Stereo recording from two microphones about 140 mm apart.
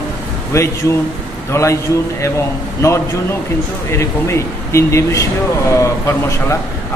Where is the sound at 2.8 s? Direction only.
20° left (ahead or behind).